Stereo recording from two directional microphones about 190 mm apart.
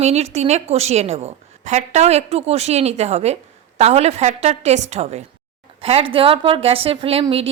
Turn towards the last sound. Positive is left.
turn(degrees=-30)  # may be behind; listen again after turning